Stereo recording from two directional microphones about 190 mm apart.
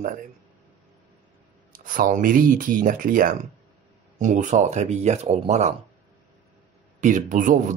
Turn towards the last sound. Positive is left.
turn(degrees=-45)  # may be behind; listen again after turning